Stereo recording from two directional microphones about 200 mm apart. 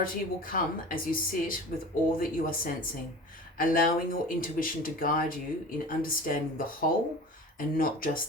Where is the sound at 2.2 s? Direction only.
45° left (ahead or behind).